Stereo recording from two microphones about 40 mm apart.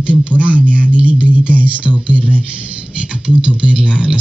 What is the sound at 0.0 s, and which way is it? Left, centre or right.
Speech, right.